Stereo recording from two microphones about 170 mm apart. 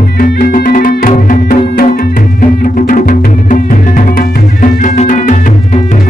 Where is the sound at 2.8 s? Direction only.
50° left (ahead or behind).